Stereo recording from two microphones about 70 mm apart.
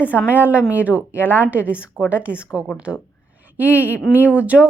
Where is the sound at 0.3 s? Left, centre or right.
Right.